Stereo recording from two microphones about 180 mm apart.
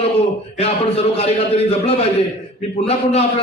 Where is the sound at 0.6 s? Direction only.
35° left (ahead or behind).